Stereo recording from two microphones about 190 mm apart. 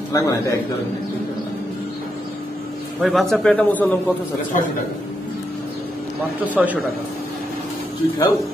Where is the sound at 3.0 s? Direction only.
Centre (ahead or behind).